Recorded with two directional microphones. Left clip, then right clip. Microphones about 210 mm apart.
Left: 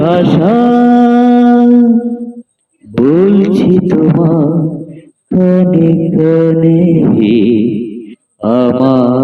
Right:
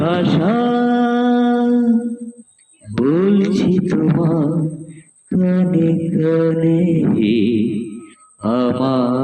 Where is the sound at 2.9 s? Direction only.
35° left (ahead or behind).